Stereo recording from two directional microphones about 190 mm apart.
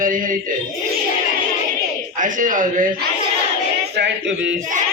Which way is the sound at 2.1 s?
45° right (ahead or behind).